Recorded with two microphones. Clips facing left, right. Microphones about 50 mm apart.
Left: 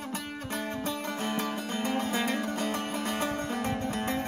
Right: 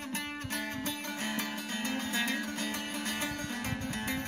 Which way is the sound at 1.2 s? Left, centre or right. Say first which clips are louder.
Left 4 dB; left.